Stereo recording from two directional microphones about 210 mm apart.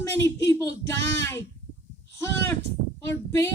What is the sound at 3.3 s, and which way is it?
Speech, 10° left (ahead or behind).